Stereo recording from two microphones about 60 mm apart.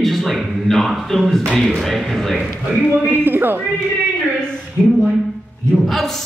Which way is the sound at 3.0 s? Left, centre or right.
Right.